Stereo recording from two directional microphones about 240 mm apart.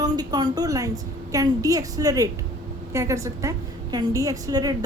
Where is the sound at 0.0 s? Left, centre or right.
Centre.